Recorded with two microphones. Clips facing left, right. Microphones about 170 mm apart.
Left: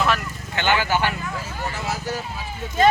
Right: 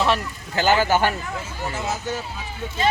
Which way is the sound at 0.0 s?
35° right (ahead or behind).